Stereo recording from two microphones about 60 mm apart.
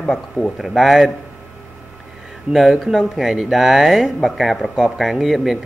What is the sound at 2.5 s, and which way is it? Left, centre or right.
Speech, centre.